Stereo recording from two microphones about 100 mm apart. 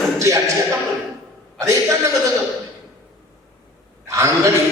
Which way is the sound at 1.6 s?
30° right (ahead or behind).